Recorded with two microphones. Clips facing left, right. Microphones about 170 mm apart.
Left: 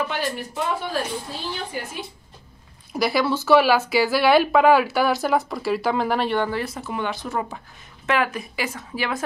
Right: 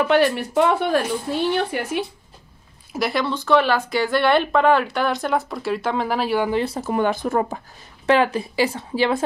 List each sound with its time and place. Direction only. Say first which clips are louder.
0.0 s speech: right 9 dB; 65° right (ahead or behind)
2.9 s speech: left 1 dB; centre (ahead or behind)
6.5 s a woman's voice: right 5 dB; 30° right (ahead or behind)
6.8 s speech: right 7 dB; 45° right (ahead or behind)
8.1 s a woman's voice: right 5 dB; 30° right (ahead or behind)